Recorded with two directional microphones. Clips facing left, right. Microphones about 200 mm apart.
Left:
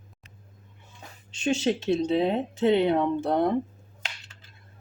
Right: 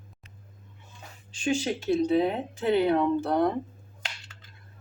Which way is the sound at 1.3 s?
25° left (ahead or behind).